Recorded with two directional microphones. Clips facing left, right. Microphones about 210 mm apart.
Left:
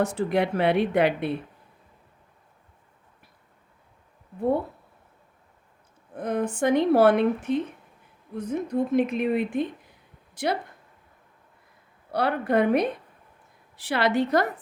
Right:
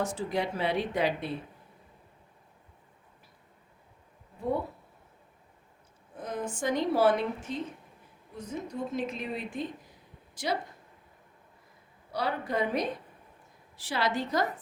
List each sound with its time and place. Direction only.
0.0 s speech: 60° left (ahead or behind)
6.1 s a woman's voice: 60° left (ahead or behind)
12.1 s speech: 60° left (ahead or behind)